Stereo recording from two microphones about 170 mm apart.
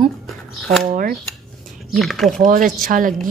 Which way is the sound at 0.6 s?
Centre (ahead or behind).